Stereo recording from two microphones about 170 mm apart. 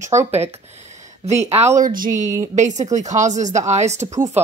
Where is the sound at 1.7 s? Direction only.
55° right (ahead or behind).